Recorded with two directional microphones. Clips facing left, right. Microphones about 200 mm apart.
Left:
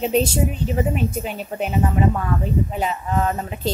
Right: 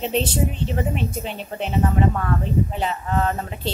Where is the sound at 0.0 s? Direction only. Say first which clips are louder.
Left 3 dB; 10° left (ahead or behind).